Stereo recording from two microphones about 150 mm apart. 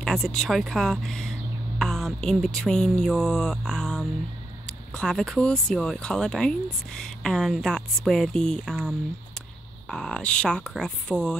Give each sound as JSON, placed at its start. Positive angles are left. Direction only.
{"t": 0.0, "sound": "speech", "side_deg": 0}
{"t": 1.8, "sound": "music", "side_deg": 0}
{"t": 4.6, "sound": "speech", "side_deg": 5}
{"t": 9.8, "sound": "speech", "side_deg": 5}